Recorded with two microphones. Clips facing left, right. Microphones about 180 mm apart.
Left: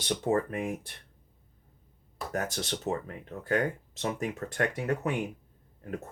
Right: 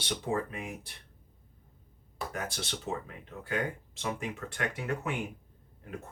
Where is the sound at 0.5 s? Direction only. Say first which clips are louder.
Left 7 dB; 50° left (ahead or behind).